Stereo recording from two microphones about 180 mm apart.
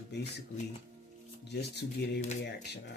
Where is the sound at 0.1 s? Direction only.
70° left (ahead or behind).